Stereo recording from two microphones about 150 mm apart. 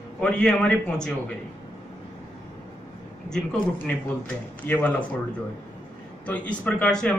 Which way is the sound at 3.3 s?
5° left (ahead or behind).